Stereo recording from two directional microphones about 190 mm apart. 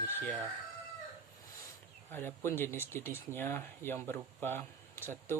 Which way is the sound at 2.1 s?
10° left (ahead or behind).